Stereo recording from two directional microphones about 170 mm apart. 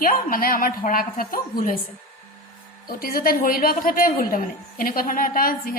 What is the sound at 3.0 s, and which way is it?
A woman's voice, 60° left (ahead or behind).